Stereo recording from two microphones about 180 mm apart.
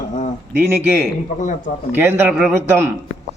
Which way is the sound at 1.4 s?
45° left (ahead or behind).